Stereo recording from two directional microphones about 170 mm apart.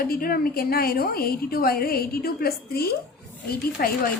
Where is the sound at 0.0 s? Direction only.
60° left (ahead or behind).